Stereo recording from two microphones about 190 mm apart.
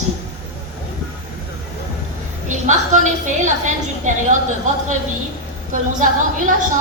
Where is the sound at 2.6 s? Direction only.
40° right (ahead or behind).